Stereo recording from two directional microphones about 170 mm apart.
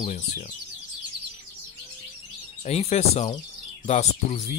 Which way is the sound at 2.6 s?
40° left (ahead or behind).